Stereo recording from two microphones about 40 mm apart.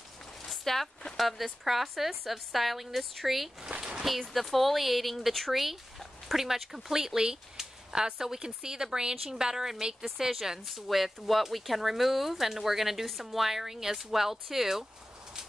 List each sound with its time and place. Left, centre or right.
0.5 s speech: centre
3.7 s a sound: right
4.3 s speech: centre